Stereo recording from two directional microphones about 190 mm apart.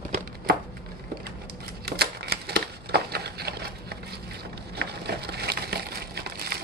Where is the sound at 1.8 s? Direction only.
60° right (ahead or behind).